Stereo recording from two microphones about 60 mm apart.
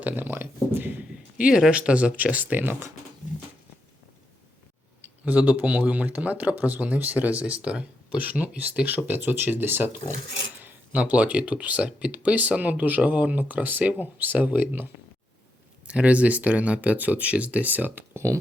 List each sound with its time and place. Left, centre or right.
0.0 s speech: right
1.5 s speech: centre; by 2.7 s right
5.0 s speech: right
10.9 s speech: right
15.9 s speech: right